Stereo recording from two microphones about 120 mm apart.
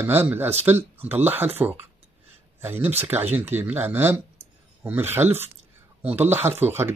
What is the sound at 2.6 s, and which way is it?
Speech, 15° right (ahead or behind).